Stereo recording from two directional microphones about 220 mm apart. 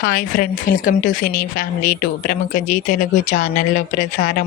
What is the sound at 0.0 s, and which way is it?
Speech, 40° left (ahead or behind).